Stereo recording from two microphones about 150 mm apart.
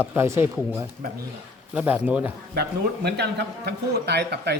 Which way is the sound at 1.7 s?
10° right (ahead or behind).